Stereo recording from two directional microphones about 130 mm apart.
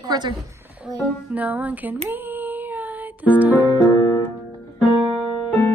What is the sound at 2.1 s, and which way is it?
Music, 15° right (ahead or behind).